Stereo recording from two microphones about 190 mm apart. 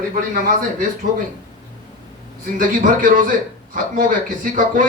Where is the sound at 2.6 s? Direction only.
45° right (ahead or behind).